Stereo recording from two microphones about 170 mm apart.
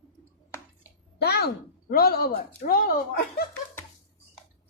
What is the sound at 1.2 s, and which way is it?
Speech, 70° left (ahead or behind).